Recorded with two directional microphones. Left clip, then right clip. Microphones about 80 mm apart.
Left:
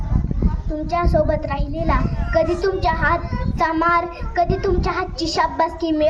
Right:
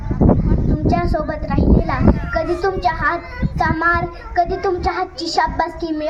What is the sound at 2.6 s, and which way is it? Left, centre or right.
Child singing, left.